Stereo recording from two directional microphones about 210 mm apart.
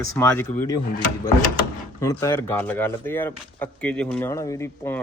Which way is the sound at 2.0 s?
15° left (ahead or behind).